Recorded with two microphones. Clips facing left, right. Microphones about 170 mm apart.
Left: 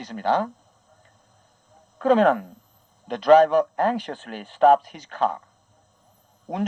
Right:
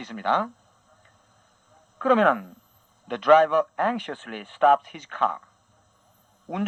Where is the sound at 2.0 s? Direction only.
35° left (ahead or behind).